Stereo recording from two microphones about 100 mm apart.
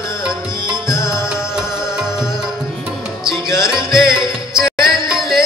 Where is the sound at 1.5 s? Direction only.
5° right (ahead or behind).